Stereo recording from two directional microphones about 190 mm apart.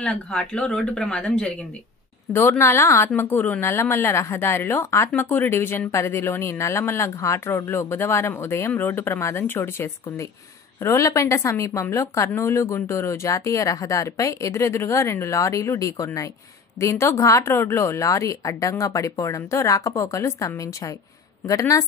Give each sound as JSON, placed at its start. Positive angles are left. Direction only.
{"t": 0.0, "sound": "a woman's voice", "side_deg": 5}